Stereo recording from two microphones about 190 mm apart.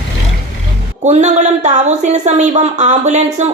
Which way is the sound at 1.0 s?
35° right (ahead or behind).